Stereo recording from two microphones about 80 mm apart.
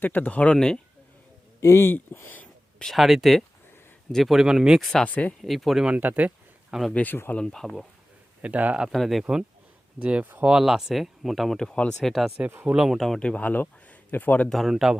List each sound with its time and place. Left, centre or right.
0.0 s speech: left
1.6 s speech: left
2.4 s a sound: centre
2.9 s speech: centre
5.0 s speech: centre
5.4 s speech: centre
5.8 s speech: centre
6.9 s speech: left
7.4 s speech: centre
8.4 s a man's voice: centre
8.8 s speech: centre
10.0 s speech: centre
12.6 s speech: centre; by 14.5 s left
14.5 s speech: centre